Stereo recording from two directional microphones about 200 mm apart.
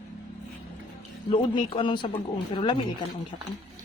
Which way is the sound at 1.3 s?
25° left (ahead or behind).